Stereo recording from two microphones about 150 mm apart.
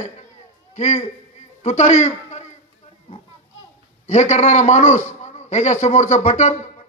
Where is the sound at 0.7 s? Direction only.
50° left (ahead or behind).